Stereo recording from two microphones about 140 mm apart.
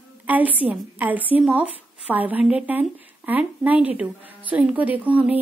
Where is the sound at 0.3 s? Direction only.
10° right (ahead or behind).